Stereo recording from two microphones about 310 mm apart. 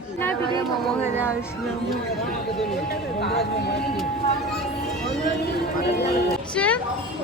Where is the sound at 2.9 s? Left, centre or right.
Left.